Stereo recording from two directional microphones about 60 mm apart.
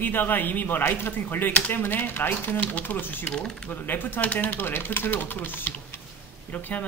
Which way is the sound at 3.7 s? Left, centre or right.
Left.